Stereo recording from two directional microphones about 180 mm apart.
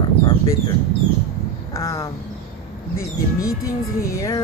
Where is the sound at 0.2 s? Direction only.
25° left (ahead or behind).